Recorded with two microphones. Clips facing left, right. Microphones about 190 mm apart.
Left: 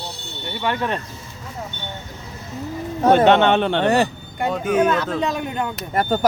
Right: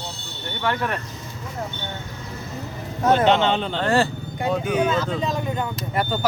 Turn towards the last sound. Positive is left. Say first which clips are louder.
# left 4 dB
turn(degrees=45)  # may be behind; listen again after turning